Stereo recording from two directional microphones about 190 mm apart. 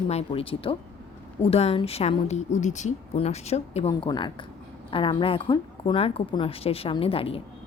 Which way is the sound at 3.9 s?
20° left (ahead or behind).